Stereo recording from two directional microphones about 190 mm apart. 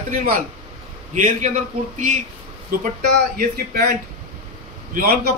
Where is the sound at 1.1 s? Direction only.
40° right (ahead or behind).